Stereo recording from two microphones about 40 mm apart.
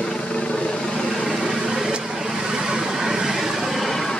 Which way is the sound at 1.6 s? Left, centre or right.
Centre.